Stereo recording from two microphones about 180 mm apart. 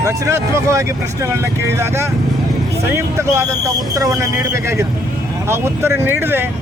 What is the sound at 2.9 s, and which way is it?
Speech, 15° right (ahead or behind).